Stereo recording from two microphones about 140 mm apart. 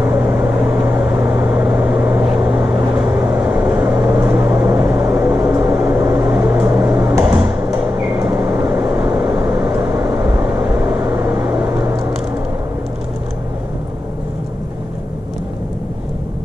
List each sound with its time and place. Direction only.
0.0 s vehicle: 20° right (ahead or behind)
5.9 s microwave oven: 15° right (ahead or behind)
8.2 s a sound: 15° right (ahead or behind)
9.8 s vehicle: 20° right (ahead or behind)